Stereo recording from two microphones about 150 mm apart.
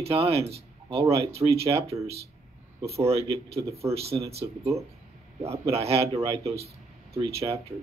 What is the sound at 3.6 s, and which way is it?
Speech, 20° right (ahead or behind).